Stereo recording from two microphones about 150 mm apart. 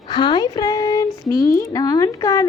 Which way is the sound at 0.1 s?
30° left (ahead or behind).